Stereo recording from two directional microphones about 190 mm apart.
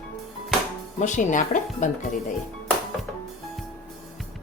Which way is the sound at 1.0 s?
40° left (ahead or behind).